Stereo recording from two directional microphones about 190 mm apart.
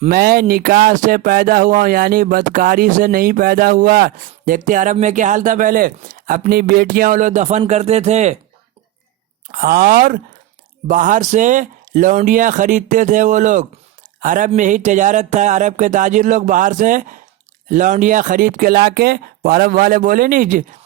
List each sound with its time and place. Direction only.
0.1 s speech: 50° right (ahead or behind)
9.5 s speech: 50° right (ahead or behind)